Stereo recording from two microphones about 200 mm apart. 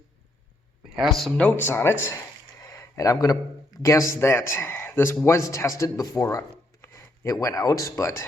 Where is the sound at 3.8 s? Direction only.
15° left (ahead or behind).